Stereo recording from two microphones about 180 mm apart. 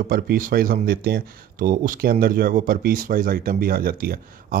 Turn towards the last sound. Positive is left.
turn(degrees=-55)  # may be behind; listen again after turning